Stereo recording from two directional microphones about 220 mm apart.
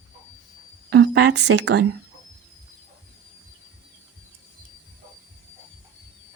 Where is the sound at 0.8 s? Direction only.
50° right (ahead or behind).